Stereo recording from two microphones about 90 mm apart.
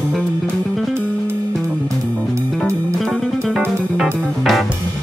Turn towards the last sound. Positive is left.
turn(degrees=-5)  # may be behind; listen again after turning